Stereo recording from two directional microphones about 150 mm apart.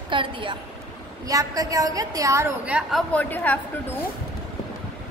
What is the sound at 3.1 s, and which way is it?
Speech, 10° left (ahead or behind).